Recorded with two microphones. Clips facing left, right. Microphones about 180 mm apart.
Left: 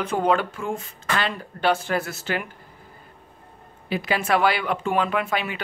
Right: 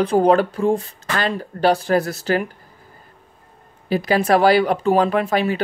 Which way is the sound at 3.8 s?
40° right (ahead or behind).